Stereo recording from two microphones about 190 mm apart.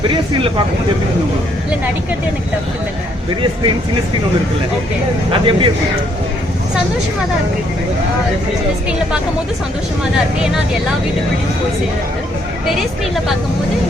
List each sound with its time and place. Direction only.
0.1 s speech: 25° right (ahead or behind)
5.5 s speech: 25° right (ahead or behind)